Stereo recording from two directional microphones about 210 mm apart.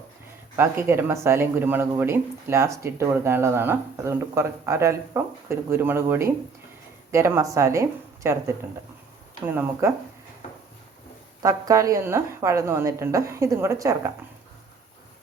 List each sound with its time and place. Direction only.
0.5 s speech: 10° right (ahead or behind)
11.4 s speech: 15° right (ahead or behind)